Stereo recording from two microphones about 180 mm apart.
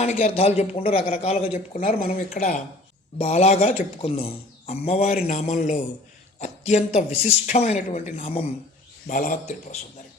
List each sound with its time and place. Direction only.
0.0 s speech: 40° left (ahead or behind)
1.5 s speech: 45° left (ahead or behind)
3.2 s speech: 35° left (ahead or behind)
9.0 s speech: 50° left (ahead or behind)